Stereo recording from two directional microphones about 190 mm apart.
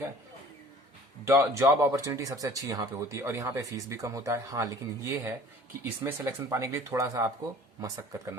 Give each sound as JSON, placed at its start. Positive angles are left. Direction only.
{"t": 1.3, "sound": "speech", "side_deg": -15}